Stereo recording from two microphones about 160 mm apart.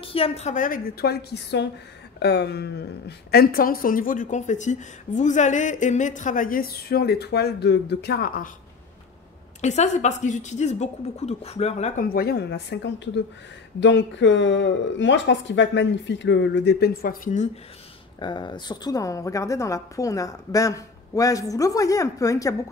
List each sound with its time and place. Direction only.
0.0 s a woman's voice: 35° left (ahead or behind); by 8.5 s 75° left (ahead or behind)
9.6 s a woman's voice: 45° left (ahead or behind)
12.0 s speech: 65° left (ahead or behind); by 13.2 s 90° left
15.4 s speech: 90° left; by 17.5 s 55° left (ahead or behind)
18.2 s a woman's voice: 30° left (ahead or behind)